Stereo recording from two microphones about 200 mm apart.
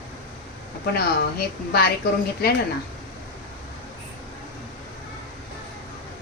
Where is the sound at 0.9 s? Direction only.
50° left (ahead or behind).